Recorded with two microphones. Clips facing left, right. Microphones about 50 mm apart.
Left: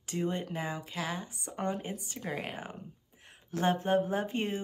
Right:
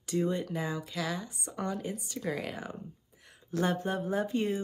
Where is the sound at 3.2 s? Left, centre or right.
Left.